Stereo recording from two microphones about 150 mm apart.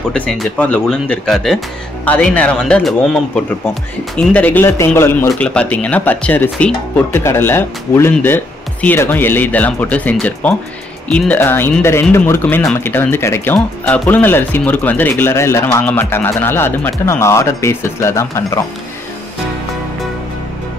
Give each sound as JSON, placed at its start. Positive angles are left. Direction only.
{"t": 0.1, "sound": "speech", "side_deg": 5}